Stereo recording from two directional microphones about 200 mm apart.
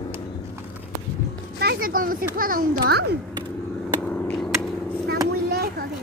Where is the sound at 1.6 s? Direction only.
50° right (ahead or behind).